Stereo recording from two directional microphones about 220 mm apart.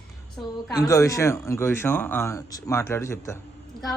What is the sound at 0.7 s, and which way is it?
Speech, 15° left (ahead or behind).